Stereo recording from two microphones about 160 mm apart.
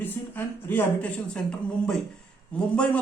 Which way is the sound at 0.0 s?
10° left (ahead or behind).